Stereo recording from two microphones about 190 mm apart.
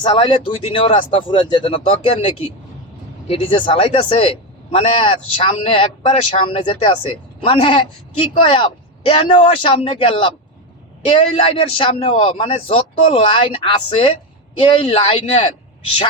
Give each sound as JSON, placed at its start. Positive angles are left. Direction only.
{"t": 0.0, "sound": "speech", "side_deg": 25}